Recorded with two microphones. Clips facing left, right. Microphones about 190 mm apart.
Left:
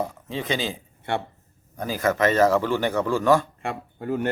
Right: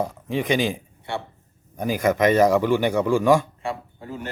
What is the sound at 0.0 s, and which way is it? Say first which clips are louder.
A man's voice: right 4 dB; 15° right (ahead or behind).